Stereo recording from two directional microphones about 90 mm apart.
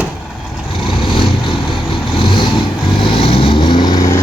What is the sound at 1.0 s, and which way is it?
Vehicle, 70° left (ahead or behind).